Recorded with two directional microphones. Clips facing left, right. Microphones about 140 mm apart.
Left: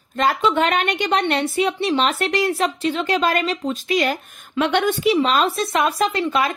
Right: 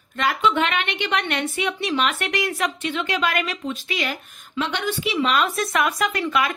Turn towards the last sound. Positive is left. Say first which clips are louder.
# left 3 dB
turn(degrees=30)  # may be behind; listen again after turning